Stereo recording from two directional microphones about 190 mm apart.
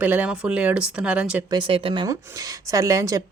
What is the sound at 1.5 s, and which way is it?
Speech, 25° right (ahead or behind).